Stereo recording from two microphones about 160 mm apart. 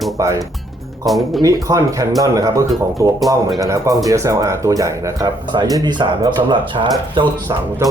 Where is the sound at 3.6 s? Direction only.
20° right (ahead or behind).